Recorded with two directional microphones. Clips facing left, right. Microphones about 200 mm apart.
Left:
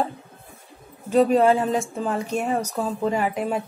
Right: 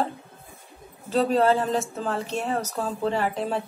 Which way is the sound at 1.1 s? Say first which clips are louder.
Left 4 dB; 10° left (ahead or behind).